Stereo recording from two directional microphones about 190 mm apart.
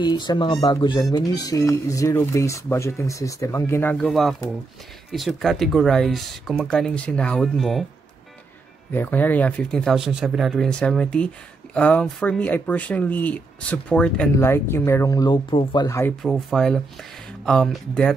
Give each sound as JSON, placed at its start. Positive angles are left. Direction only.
{"t": 0.0, "sound": "speech", "side_deg": 25}
{"t": 8.9, "sound": "speech", "side_deg": 10}
{"t": 16.2, "sound": "speech", "side_deg": 0}